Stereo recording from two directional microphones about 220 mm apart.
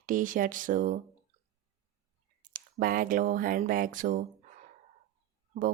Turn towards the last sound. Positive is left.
turn(degrees=-35)  # may be behind; listen again after turning